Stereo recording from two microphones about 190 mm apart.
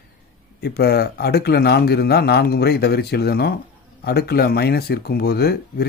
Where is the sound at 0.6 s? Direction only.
55° left (ahead or behind).